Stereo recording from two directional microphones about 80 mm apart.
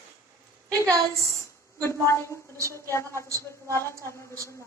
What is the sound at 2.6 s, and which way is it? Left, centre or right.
A woman's voice, left.